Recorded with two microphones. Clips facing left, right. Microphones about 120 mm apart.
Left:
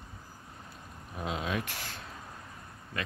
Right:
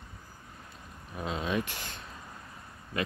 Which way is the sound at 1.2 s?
5° left (ahead or behind).